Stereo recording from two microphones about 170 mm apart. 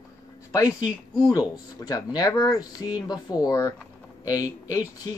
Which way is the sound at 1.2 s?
25° left (ahead or behind).